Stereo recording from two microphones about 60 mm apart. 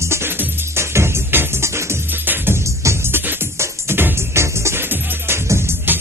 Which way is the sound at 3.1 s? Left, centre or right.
Right.